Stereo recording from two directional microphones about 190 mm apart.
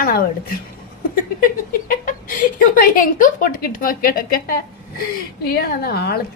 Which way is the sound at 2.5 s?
45° left (ahead or behind).